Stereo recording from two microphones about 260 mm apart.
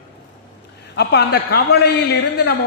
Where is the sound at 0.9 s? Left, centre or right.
Left.